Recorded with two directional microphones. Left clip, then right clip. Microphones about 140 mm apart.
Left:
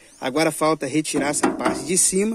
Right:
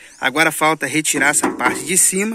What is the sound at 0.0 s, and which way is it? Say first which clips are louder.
Speech: right 5 dB; 10° left (ahead or behind).